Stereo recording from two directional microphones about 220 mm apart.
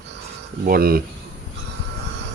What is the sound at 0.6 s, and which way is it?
Speech, 40° right (ahead or behind).